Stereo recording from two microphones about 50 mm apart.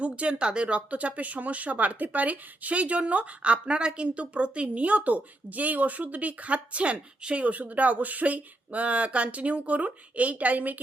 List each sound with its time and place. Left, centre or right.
0.0 s speech: right